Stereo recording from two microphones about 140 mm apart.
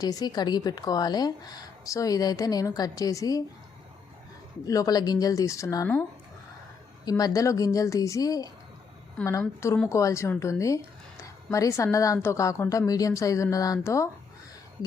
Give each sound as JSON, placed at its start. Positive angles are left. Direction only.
{"t": 0.0, "sound": "a woman's voice", "side_deg": 25}
{"t": 4.6, "sound": "a woman's voice", "side_deg": 25}
{"t": 7.0, "sound": "a woman's voice", "side_deg": 25}